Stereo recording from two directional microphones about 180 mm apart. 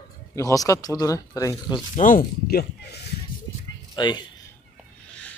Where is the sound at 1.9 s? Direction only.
50° left (ahead or behind).